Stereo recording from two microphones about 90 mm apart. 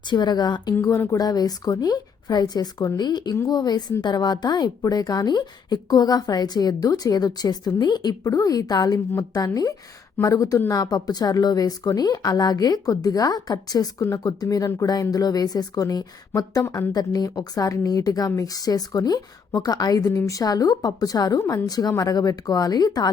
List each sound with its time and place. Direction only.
0.1 s a woman's voice: 55° left (ahead or behind)
0.8 s a woman's voice: 40° left (ahead or behind)